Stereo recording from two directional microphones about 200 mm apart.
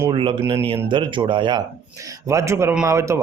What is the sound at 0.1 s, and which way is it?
Speech, 25° right (ahead or behind).